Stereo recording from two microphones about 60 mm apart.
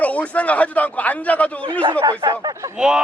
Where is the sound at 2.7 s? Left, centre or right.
Centre.